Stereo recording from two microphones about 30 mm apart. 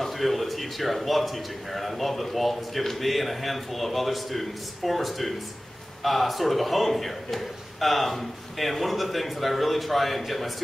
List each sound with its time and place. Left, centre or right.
0.0 s a man's voice: centre